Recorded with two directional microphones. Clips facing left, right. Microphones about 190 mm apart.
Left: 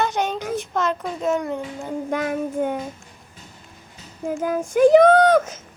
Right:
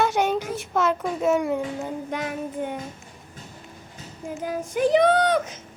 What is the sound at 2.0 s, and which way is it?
Speech, 50° left (ahead or behind).